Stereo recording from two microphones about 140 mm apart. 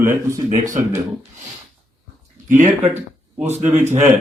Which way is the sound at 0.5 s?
65° right (ahead or behind).